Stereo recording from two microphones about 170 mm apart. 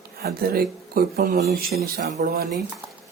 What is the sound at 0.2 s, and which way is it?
Speech, 65° right (ahead or behind).